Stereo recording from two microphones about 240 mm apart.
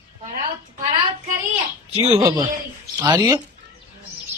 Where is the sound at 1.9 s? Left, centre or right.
Right.